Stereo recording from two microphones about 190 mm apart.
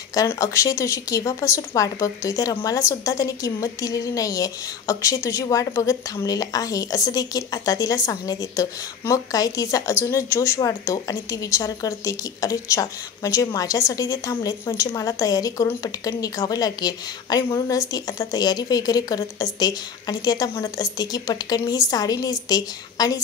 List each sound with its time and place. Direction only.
0.1 s a woman's voice: 20° left (ahead or behind)